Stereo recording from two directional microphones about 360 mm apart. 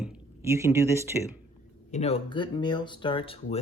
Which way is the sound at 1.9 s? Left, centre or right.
Centre.